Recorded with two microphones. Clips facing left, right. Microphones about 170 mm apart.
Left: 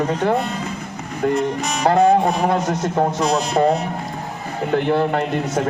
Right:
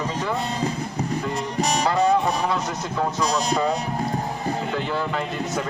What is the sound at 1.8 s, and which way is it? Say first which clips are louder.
A man's voice: left 7 dB; 55° left (ahead or behind).